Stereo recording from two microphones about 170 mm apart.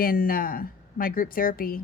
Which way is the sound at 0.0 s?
60° left (ahead or behind).